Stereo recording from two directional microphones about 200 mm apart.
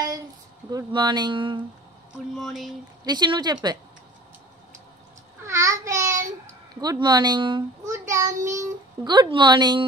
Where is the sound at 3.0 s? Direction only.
20° right (ahead or behind).